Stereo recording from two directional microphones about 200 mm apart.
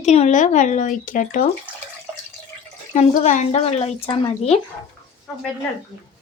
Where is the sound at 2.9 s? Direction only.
35° left (ahead or behind).